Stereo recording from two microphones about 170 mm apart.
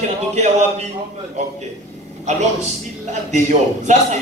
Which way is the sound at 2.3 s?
45° right (ahead or behind).